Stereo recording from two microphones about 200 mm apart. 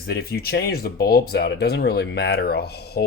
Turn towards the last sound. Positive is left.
turn(degrees=55)  # may be behind; listen again after turning